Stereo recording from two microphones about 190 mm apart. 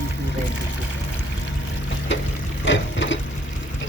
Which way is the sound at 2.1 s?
75° left (ahead or behind).